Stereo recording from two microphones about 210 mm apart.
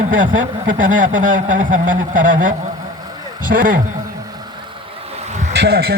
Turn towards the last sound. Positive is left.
turn(degrees=-50)  # may be behind; listen again after turning